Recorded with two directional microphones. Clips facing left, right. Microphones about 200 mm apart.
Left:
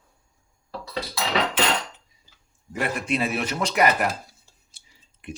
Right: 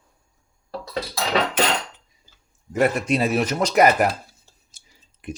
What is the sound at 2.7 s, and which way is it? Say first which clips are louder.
Speech: right 6 dB; 40° right (ahead or behind).